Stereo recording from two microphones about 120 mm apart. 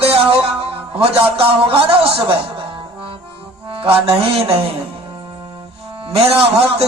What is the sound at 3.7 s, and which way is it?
Music, 50° right (ahead or behind).